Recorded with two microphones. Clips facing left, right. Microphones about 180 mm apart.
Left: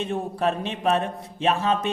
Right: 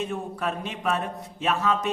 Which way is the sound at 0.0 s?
30° left (ahead or behind).